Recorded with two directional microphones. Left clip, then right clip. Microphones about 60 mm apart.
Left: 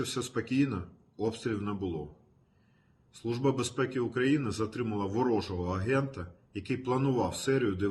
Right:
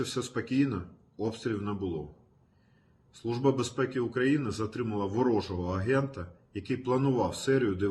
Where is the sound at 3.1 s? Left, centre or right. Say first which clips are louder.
Right 2 dB; left.